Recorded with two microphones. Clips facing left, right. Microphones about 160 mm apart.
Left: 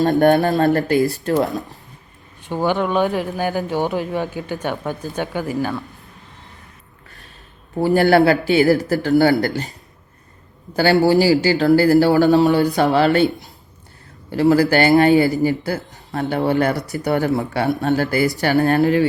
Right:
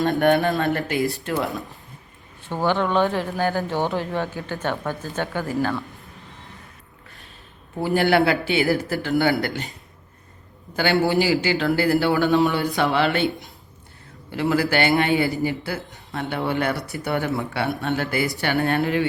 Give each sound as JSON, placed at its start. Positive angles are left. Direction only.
{"t": 0.0, "sound": "speech", "side_deg": 40}
{"t": 2.4, "sound": "speech", "side_deg": 15}
{"t": 7.8, "sound": "speech", "side_deg": 40}
{"t": 10.8, "sound": "speech", "side_deg": 40}